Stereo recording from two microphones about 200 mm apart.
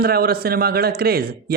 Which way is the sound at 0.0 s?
50° right (ahead or behind).